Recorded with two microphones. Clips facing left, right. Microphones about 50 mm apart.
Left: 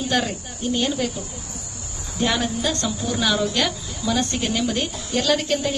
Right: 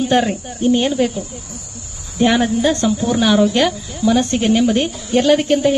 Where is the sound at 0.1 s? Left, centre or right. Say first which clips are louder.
Right 7 dB; right.